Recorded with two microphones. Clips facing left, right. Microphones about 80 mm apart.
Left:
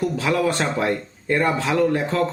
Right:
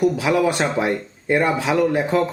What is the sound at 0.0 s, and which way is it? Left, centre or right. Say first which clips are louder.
A man's voice: right 3 dB; centre.